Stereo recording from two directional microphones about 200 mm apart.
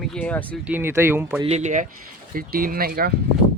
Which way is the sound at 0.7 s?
10° right (ahead or behind).